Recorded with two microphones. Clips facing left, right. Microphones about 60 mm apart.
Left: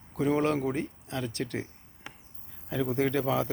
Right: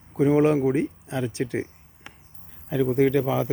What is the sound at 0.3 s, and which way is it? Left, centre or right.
Speech, centre.